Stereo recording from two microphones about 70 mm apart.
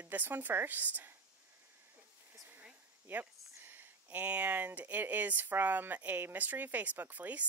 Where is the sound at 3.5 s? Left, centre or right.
Right.